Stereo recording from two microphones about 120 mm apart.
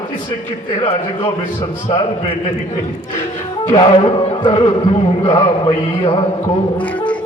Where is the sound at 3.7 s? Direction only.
35° left (ahead or behind).